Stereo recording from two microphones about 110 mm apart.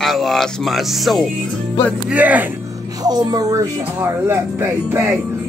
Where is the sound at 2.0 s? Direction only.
15° right (ahead or behind).